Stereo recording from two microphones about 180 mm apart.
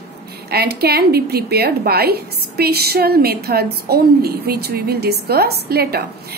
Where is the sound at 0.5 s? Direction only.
60° right (ahead or behind).